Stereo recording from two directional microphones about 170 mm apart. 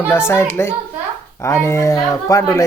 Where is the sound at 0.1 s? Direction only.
15° left (ahead or behind).